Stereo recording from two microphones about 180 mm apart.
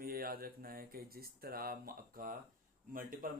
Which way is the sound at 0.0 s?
55° right (ahead or behind).